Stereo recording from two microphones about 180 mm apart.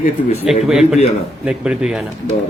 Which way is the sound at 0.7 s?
5° right (ahead or behind).